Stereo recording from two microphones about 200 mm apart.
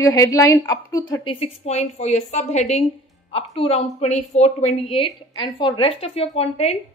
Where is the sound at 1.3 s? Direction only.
30° left (ahead or behind).